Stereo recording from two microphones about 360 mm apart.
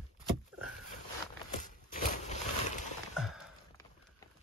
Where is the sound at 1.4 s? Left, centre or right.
Left.